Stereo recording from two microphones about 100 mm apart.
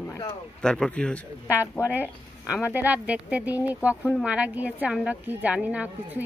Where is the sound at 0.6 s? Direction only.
5° left (ahead or behind).